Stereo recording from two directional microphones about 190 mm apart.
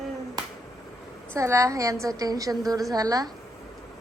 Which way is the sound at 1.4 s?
15° right (ahead or behind).